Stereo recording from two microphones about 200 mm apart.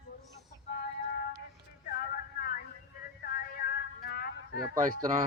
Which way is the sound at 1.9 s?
45° left (ahead or behind).